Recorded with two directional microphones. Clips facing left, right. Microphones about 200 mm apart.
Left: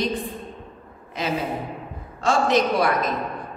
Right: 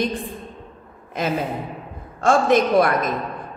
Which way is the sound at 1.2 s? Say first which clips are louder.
Right 2 dB; 50° right (ahead or behind).